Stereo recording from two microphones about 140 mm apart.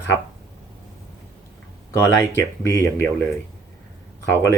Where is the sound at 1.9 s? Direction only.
20° left (ahead or behind).